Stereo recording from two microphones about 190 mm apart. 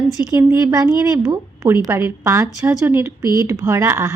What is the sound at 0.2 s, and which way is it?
A woman's voice, 10° right (ahead or behind).